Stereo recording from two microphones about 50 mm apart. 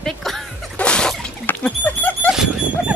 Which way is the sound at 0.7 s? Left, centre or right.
Centre.